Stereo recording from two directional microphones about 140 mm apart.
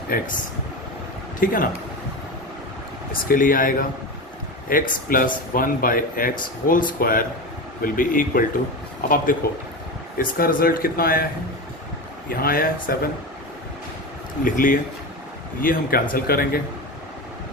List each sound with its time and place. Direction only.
0.1 s speech: 90° left
1.4 s speech: 90° left
3.1 s speech: 85° left
9.0 s speech: 90° left
12.3 s speech: 90° left
14.4 s speech: 70° left (ahead or behind)
15.6 s speech: 90° left